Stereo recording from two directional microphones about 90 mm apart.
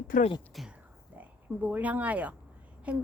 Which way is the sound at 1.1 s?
20° right (ahead or behind).